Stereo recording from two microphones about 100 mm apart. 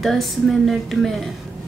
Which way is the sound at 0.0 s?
Centre (ahead or behind).